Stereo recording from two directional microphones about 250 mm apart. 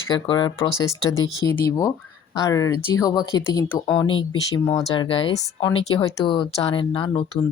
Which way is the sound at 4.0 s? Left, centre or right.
Centre.